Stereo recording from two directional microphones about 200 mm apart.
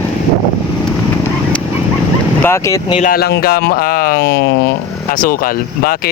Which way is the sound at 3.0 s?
50° left (ahead or behind).